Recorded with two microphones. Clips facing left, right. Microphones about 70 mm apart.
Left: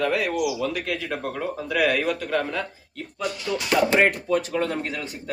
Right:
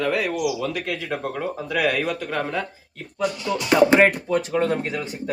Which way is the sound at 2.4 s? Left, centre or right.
Centre.